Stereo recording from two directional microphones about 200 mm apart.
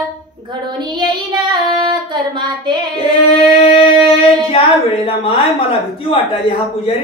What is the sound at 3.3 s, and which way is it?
Singing, 30° left (ahead or behind).